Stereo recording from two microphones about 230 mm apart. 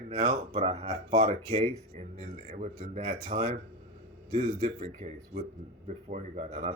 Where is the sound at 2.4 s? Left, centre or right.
Right.